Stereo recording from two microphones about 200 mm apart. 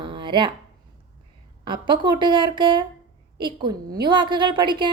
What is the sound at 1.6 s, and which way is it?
A woman's voice, 25° right (ahead or behind).